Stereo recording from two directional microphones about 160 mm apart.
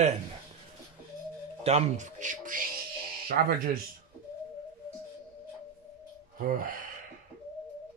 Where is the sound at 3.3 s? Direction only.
75° right (ahead or behind).